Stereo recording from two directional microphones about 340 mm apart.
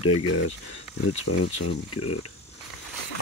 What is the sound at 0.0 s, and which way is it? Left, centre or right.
Speech, left.